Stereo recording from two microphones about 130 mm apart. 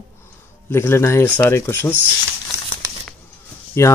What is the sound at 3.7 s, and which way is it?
Speech, 20° left (ahead or behind).